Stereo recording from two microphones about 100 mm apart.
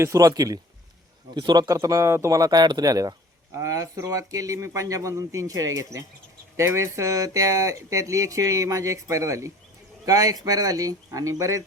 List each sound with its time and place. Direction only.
0.0 s speech: 35° right (ahead or behind)